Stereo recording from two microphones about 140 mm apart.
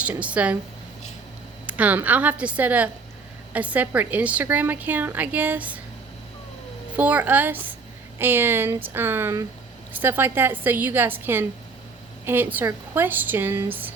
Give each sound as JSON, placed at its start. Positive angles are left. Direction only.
{"t": 0.0, "sound": "a woman's voice", "side_deg": -10}
{"t": 1.6, "sound": "a woman's voice", "side_deg": -10}
{"t": 6.9, "sound": "a woman's voice", "side_deg": -10}